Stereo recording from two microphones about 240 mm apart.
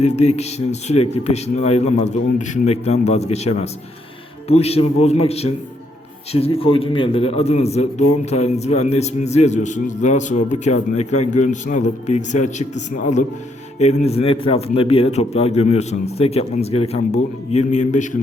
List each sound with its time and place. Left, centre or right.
0.2 s a man's voice: left